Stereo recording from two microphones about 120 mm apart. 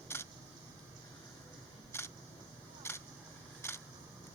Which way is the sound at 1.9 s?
20° left (ahead or behind).